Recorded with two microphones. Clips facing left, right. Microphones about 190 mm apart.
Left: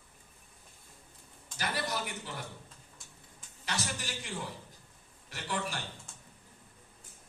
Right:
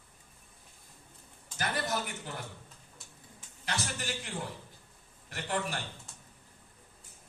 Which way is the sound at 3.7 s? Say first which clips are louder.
Right 1 dB; 55° right (ahead or behind).